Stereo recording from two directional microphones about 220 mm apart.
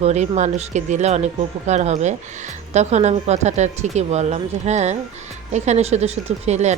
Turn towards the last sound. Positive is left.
turn(degrees=-30)  # may be behind; listen again after turning